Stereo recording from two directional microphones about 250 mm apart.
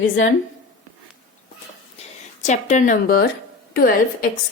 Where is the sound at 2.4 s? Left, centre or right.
Left.